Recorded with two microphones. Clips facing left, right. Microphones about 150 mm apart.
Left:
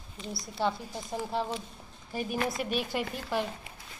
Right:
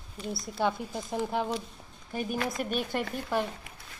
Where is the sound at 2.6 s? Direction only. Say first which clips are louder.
Right 1 dB; 45° right (ahead or behind).